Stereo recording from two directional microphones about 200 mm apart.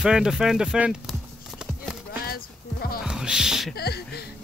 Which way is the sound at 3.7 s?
50° left (ahead or behind).